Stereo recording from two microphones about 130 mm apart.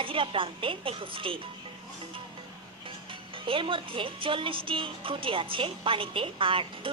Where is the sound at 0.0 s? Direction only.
40° right (ahead or behind).